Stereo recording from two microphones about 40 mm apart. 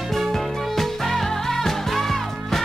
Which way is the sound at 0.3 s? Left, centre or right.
Centre.